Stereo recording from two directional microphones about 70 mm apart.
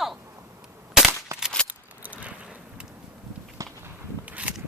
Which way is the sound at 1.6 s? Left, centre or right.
Right.